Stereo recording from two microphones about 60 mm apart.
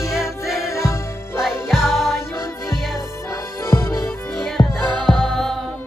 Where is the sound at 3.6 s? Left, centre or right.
Left.